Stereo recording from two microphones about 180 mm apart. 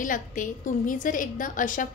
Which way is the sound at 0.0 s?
45° left (ahead or behind).